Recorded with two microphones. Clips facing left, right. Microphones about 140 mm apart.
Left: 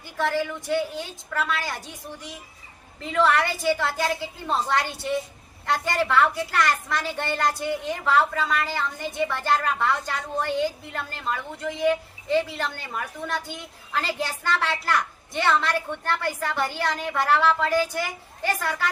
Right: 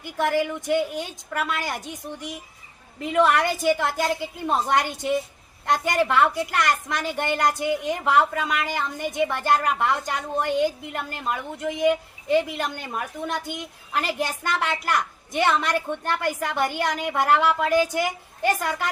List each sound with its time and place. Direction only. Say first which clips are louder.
0.0 s a woman's voice: right 2 dB; 15° right (ahead or behind)